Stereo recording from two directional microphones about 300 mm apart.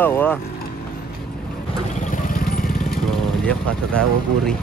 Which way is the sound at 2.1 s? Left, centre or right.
Left.